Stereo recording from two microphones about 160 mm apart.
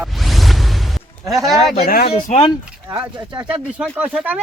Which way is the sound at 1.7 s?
70° left (ahead or behind).